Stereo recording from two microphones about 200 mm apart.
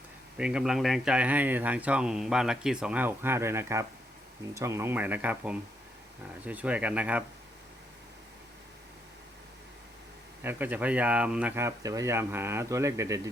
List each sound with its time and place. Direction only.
0.3 s speech: 5° right (ahead or behind)
10.4 s speech: 10° right (ahead or behind)